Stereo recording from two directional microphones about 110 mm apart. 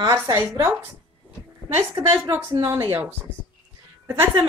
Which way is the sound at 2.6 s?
30° right (ahead or behind).